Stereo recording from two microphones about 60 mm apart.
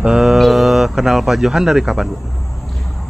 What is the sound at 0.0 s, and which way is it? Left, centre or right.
Mantra, centre.